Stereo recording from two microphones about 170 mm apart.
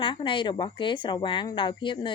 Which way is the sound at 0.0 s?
30° left (ahead or behind).